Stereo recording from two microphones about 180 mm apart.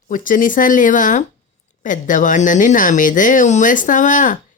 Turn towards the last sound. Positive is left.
turn(degrees=45)  # may be behind; listen again after turning